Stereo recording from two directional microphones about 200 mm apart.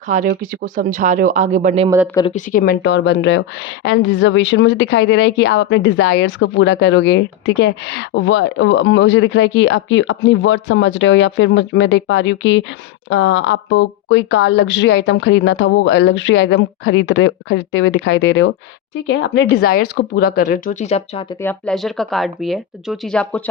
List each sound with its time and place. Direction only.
0.3 s speech: 45° right (ahead or behind)
2.3 s a woman's voice: 45° left (ahead or behind); by 21.3 s 30° left (ahead or behind)
21.4 s speech: 5° left (ahead or behind)